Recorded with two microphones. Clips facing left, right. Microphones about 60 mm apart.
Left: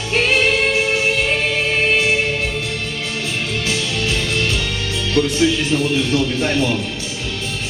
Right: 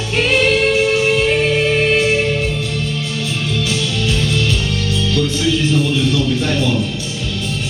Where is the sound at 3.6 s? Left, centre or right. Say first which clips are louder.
Right 1 dB; left.